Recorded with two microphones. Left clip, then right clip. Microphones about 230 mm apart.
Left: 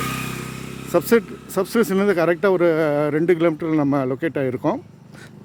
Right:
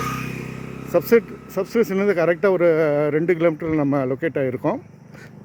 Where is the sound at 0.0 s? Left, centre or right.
Left.